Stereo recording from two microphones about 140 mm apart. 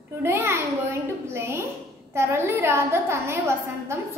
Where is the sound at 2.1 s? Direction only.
20° right (ahead or behind).